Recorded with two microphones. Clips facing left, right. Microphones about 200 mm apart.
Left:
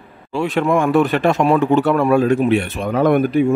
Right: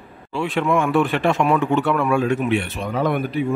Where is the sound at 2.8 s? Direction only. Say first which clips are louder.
Left 7 dB; 50° left (ahead or behind).